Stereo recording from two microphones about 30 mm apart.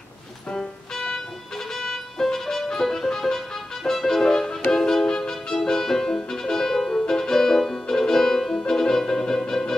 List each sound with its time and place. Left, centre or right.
0.5 s music: centre